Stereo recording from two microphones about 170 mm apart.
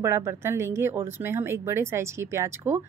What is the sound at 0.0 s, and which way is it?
Speech, 15° right (ahead or behind).